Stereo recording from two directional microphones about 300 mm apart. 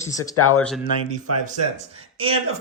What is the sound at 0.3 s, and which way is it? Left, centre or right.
Speech, left.